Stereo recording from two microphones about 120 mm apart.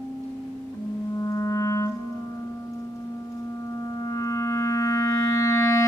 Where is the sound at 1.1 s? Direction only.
25° left (ahead or behind).